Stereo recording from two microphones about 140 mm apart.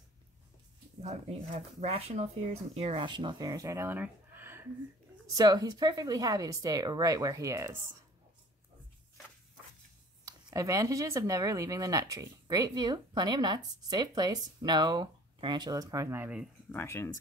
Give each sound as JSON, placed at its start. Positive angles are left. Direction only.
{"t": 1.0, "sound": "speech", "side_deg": -55}
{"t": 5.3, "sound": "speech", "side_deg": -25}
{"t": 10.2, "sound": "speech", "side_deg": -25}
{"t": 16.7, "sound": "speech", "side_deg": 20}